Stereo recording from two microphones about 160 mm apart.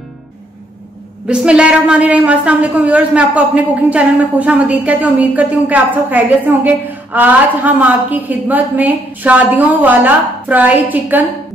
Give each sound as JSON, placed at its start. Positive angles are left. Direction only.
{"t": 1.2, "sound": "a woman's voice", "side_deg": -5}